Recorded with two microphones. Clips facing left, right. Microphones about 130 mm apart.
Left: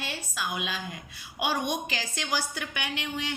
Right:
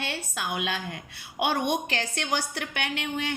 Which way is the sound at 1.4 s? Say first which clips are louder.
Right 3 dB; 20° right (ahead or behind).